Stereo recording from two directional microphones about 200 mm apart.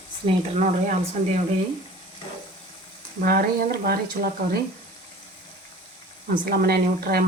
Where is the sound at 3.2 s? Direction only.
45° right (ahead or behind).